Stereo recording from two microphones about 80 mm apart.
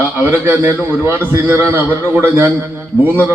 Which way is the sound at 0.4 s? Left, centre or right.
Right.